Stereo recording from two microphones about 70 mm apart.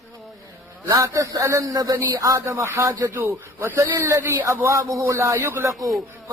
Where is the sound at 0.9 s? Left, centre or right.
Right.